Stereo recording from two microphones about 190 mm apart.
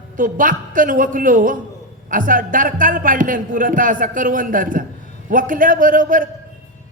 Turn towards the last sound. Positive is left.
turn(degrees=-45)  # may be behind; listen again after turning